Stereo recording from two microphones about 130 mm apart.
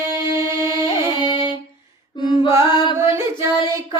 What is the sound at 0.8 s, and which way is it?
Music, 40° left (ahead or behind).